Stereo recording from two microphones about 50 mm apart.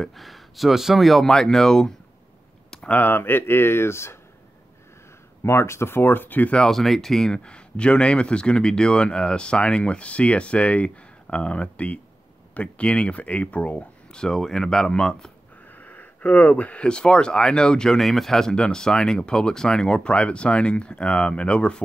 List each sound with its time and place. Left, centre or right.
0.0 s speech: centre
3.0 s speech: left
5.4 s speech: left
6.7 s speech: centre
15.7 s speech: left; by 18.0 s centre
18.0 s speech: centre; by 21.8 s left